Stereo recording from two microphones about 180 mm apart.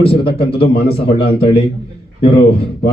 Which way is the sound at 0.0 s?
30° left (ahead or behind).